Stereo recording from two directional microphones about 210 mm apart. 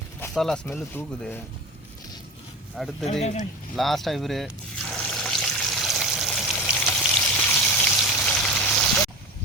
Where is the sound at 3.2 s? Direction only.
35° left (ahead or behind).